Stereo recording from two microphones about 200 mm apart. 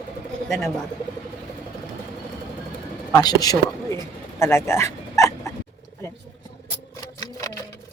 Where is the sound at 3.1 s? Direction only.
20° left (ahead or behind).